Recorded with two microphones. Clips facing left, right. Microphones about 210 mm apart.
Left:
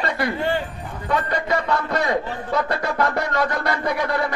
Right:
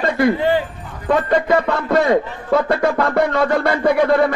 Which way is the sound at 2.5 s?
55° right (ahead or behind).